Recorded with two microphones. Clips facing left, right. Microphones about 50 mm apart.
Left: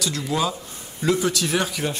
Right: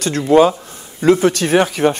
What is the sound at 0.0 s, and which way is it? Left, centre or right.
Speech, right.